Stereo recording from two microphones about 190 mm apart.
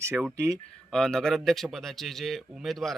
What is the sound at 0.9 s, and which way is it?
Speech, 5° left (ahead or behind).